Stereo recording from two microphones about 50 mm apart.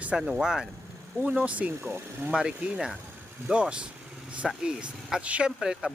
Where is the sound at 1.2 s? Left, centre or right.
Right.